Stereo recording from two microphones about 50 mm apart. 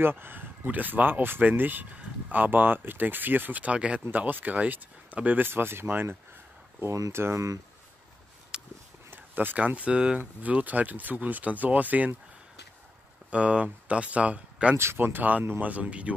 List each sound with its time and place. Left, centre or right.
0.0 s speech: right
4.1 s speech: right
5.5 s speech: right
6.9 s speech: right
8.5 s a sound: centre
9.1 s a sound: right
9.6 s speech: right
10.4 s speech: right
13.3 s speech: right
15.0 s speech: right